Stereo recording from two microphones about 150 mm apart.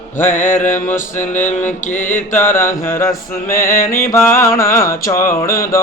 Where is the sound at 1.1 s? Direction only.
55° left (ahead or behind).